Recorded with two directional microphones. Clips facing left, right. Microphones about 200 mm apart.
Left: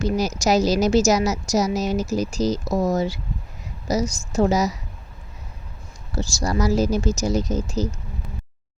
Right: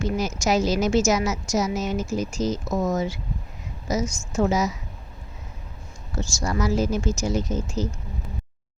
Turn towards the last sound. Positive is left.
turn(degrees=40)  # may be behind; listen again after turning